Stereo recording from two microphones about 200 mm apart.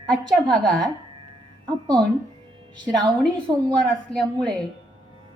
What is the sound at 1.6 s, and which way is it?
Speech, 20° right (ahead or behind).